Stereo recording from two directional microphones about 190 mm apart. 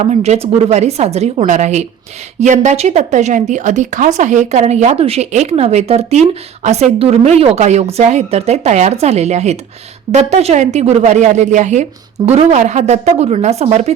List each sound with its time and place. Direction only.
0.0 s a woman's voice: 35° right (ahead or behind)